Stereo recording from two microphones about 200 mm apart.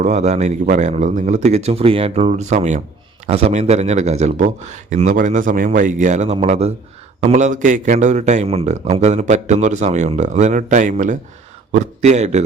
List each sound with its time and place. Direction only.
0.0 s speech: 35° right (ahead or behind)